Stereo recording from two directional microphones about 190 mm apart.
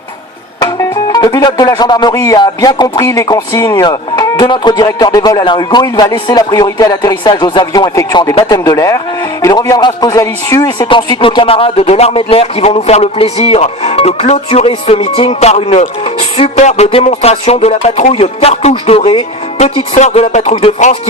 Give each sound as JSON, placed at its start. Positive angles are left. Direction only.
{"t": 1.1, "sound": "a man's voice", "side_deg": 20}